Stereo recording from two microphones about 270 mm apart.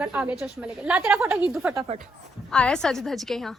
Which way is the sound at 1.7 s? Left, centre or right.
Right.